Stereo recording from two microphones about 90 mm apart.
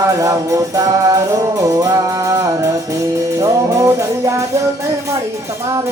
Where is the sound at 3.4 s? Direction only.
35° right (ahead or behind).